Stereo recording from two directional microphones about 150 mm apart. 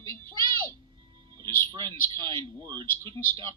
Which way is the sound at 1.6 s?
30° right (ahead or behind).